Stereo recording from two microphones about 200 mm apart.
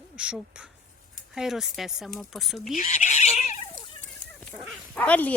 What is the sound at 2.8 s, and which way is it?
Cat, 35° left (ahead or behind).